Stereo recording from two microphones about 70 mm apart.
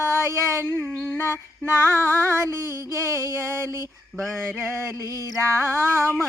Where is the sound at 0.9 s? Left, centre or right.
Centre.